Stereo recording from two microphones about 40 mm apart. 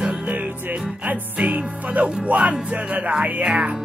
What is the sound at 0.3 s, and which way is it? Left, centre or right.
Music, right.